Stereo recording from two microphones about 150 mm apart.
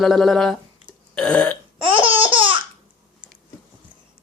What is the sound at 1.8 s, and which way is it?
Laughter, 35° right (ahead or behind).